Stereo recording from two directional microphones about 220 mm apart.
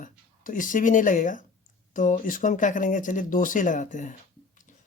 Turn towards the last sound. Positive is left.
turn(degrees=35)  # may be behind; listen again after turning